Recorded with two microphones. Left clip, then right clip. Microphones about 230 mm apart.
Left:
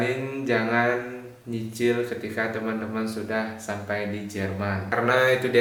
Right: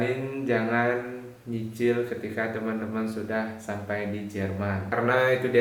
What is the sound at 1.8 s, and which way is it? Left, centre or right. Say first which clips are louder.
Speech: left 1 dB; centre.